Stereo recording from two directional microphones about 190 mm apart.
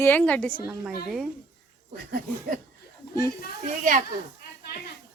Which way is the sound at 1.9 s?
55° right (ahead or behind).